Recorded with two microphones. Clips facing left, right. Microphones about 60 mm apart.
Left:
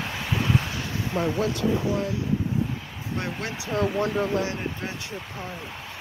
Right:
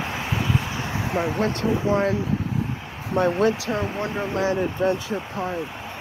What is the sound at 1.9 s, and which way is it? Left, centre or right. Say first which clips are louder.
Speech: right 5 dB; right.